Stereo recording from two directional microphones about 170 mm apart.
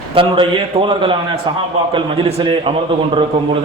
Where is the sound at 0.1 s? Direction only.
30° right (ahead or behind).